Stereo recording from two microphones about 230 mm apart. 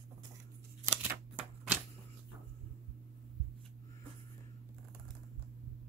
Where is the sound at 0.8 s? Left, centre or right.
Centre.